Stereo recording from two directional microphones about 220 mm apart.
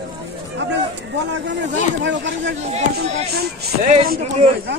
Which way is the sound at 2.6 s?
30° right (ahead or behind).